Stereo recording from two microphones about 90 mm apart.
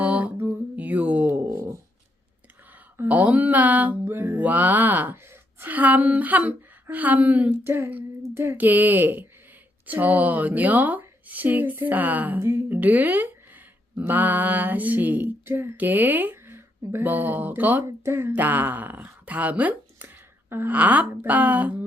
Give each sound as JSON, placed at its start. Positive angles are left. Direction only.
{"t": 0.0, "sound": "a sound", "side_deg": -15}
{"t": 1.5, "sound": "a sound", "side_deg": -35}
{"t": 3.0, "sound": "speech", "side_deg": -15}
{"t": 4.1, "sound": "speech", "side_deg": -30}
{"t": 4.4, "sound": "a woman's voice", "side_deg": -15}
{"t": 17.8, "sound": "speech", "side_deg": -30}